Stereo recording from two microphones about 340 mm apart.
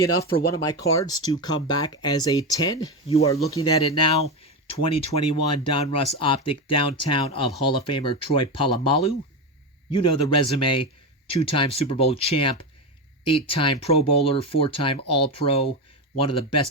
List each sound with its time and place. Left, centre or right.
0.0 s speech: centre
3.5 s speech: left
3.9 s speech: centre